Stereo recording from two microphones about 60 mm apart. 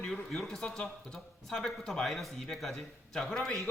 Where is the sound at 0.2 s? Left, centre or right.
Centre.